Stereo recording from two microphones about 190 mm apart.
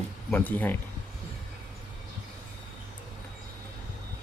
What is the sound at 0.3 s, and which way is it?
Speech, 10° left (ahead or behind).